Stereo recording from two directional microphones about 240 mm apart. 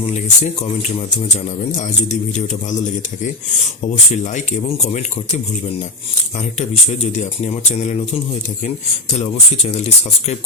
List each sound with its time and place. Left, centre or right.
0.1 s speech: left
4.1 s speech: left
6.6 s speech: left
9.1 s speech: left